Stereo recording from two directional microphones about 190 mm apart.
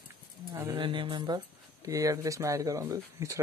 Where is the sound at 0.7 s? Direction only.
25° right (ahead or behind).